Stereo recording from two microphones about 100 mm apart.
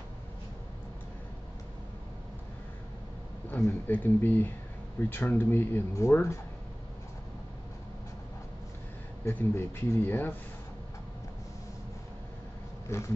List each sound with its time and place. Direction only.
3.4 s speech: 25° left (ahead or behind)
9.2 s speech: 25° left (ahead or behind)
12.9 s speech: 30° left (ahead or behind)